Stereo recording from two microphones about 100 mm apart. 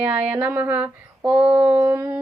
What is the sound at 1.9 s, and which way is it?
Howl, 20° right (ahead or behind).